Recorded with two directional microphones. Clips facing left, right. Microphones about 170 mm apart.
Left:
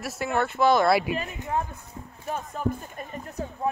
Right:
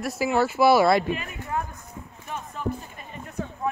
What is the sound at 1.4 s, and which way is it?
Clip-clop, 25° left (ahead or behind).